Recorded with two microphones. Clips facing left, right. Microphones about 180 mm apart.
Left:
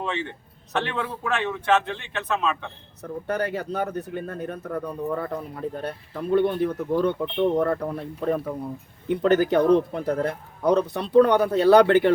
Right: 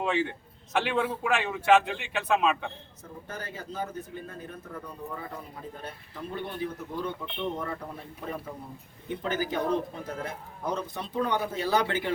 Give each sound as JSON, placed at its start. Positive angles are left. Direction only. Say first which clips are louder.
{"t": 0.0, "sound": "a man's voice", "louder": "right 1 dB", "side_deg": -10}
{"t": 3.0, "sound": "speech", "louder": "left 14 dB", "side_deg": 70}